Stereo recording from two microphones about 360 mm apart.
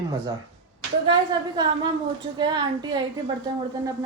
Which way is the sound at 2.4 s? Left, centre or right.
Centre.